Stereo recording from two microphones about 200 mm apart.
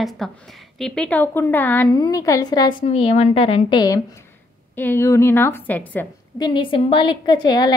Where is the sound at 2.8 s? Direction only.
30° left (ahead or behind).